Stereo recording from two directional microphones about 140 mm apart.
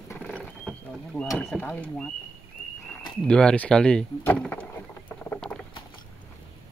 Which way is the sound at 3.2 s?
5° left (ahead or behind).